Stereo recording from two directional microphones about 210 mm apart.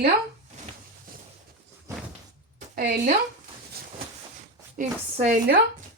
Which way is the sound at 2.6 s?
45° right (ahead or behind).